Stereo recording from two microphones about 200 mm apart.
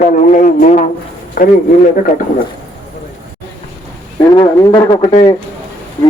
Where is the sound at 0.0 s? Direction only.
40° left (ahead or behind).